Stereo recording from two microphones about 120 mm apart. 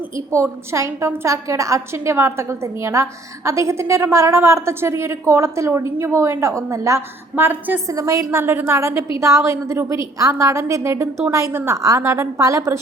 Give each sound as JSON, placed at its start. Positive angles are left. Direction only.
{"t": 0.2, "sound": "a woman's voice", "side_deg": -25}